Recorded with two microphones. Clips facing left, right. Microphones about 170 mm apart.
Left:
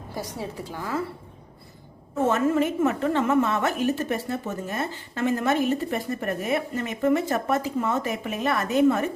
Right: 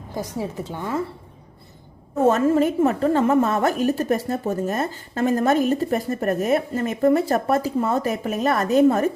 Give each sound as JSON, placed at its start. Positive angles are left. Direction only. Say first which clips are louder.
{"t": 0.1, "sound": "a woman's voice", "louder": "right 5 dB", "side_deg": -15}
{"t": 2.2, "sound": "a woman's voice", "louder": "right 5 dB", "side_deg": -40}